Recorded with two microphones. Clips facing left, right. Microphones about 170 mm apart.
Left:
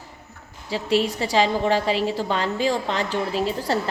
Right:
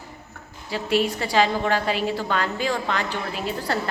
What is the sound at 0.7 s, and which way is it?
A woman's voice, 35° left (ahead or behind).